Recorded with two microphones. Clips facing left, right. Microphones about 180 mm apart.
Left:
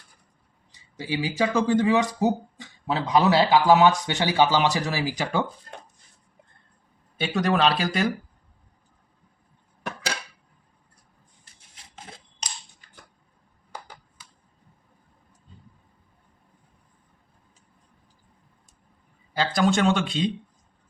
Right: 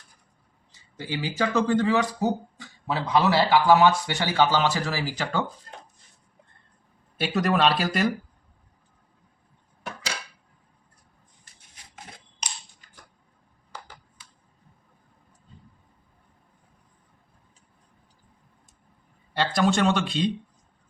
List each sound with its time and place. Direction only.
0.9 s speech: 10° left (ahead or behind)
7.2 s speech: centre (ahead or behind)
19.3 s speech: centre (ahead or behind)